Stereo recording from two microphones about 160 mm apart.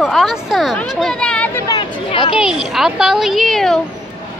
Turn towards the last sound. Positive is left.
turn(degrees=0)  # may be behind; listen again after turning